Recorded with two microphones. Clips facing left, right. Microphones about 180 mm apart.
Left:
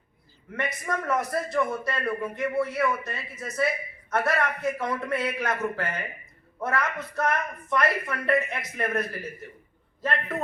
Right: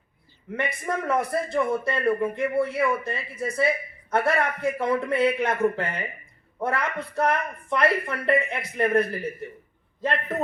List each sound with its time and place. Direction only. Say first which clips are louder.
0.5 s a man's voice: right 2 dB; 25° right (ahead or behind)